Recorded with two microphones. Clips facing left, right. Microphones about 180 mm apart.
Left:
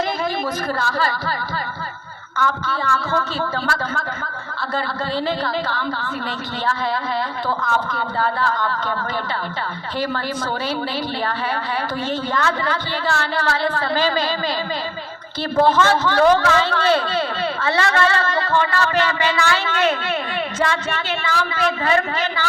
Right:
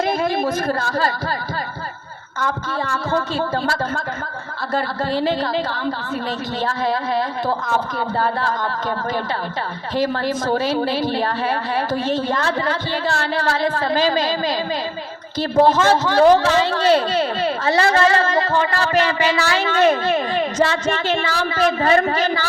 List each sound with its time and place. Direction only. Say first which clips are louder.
2.6 s speech: even; 35° right (ahead or behind)
5.6 s speech: right 1 dB; 35° right (ahead or behind)
7.7 s speech: right 1 dB; 40° right (ahead or behind)
10.4 s speech: right 5 dB; 40° right (ahead or behind)
12.3 s speech: right 1 dB; 35° right (ahead or behind)
15.6 s speech: even; 35° right (ahead or behind)